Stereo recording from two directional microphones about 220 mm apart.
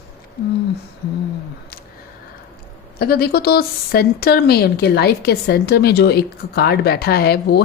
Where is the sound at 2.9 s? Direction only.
45° left (ahead or behind).